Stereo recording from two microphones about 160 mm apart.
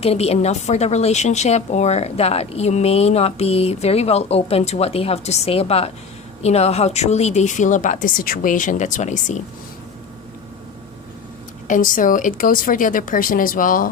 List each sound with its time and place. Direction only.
0.0 s a woman's voice: 40° left (ahead or behind)
11.7 s a woman's voice: 55° left (ahead or behind)